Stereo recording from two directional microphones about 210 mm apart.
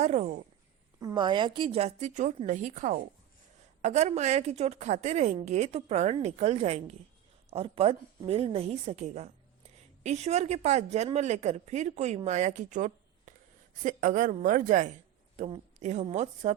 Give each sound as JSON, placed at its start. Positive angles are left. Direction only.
{"t": 0.0, "sound": "a woman's voice", "side_deg": -30}
{"t": 0.9, "sound": "a woman's voice", "side_deg": -20}